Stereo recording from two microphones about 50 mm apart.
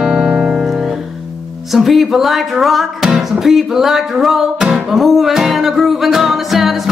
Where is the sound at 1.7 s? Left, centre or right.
Centre.